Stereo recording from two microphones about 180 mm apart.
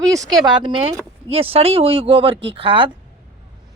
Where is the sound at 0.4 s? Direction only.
25° right (ahead or behind).